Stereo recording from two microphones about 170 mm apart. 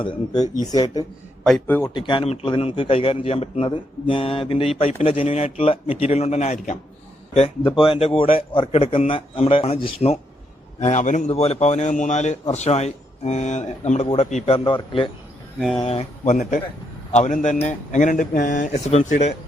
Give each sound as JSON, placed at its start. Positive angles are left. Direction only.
{"t": 0.0, "sound": "speech", "side_deg": 25}
{"t": 1.6, "sound": "a man's voice", "side_deg": 10}
{"t": 1.9, "sound": "a man's voice", "side_deg": 30}
{"t": 10.8, "sound": "a man's voice", "side_deg": 45}